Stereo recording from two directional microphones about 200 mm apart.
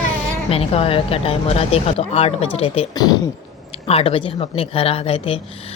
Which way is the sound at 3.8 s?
30° left (ahead or behind).